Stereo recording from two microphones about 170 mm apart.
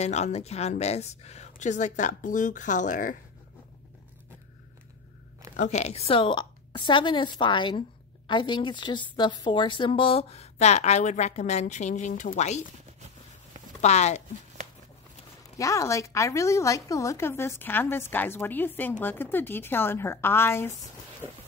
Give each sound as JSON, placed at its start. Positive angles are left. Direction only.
{"t": 0.0, "sound": "speech", "side_deg": 40}
{"t": 5.6, "sound": "a woman's voice", "side_deg": 40}
{"t": 13.7, "sound": "a woman's voice", "side_deg": 40}
{"t": 15.5, "sound": "a woman's voice", "side_deg": 20}